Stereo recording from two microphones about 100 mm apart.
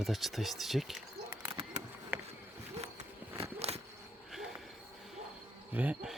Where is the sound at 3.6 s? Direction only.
90° right.